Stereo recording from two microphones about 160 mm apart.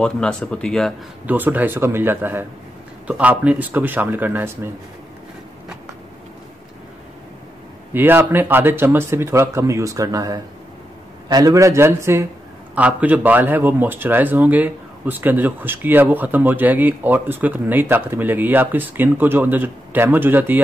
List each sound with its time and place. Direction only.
0.0 s speech: 5° left (ahead or behind)
1.2 s speech: 10° right (ahead or behind)
7.9 s a man's voice: 15° right (ahead or behind)